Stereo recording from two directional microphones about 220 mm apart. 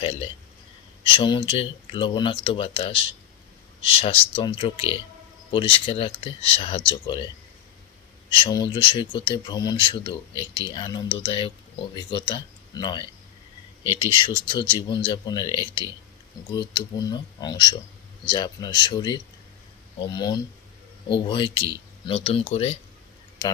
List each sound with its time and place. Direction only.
0.0 s speech: 25° left (ahead or behind)
8.4 s speech: 20° left (ahead or behind)